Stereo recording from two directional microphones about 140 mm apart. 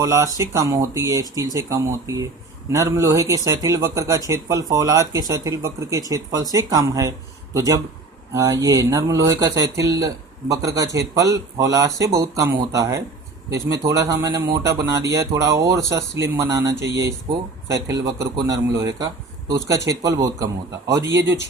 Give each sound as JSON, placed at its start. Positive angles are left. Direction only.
{"t": 0.0, "sound": "speech", "side_deg": -20}